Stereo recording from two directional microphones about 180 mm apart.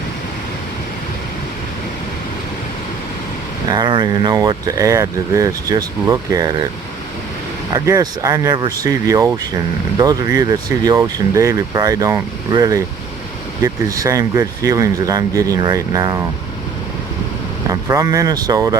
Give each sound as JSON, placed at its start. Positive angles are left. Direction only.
{"t": 3.7, "sound": "speech", "side_deg": -25}
{"t": 7.7, "sound": "speech", "side_deg": -15}
{"t": 17.7, "sound": "speech", "side_deg": -20}